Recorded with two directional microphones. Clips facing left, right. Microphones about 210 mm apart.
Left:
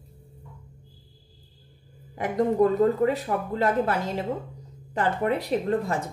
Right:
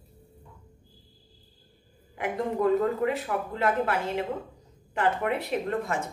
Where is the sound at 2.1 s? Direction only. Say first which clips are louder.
Left 5 dB; 35° left (ahead or behind).